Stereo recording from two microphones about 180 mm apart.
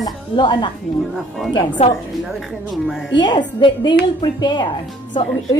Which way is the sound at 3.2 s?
25° left (ahead or behind).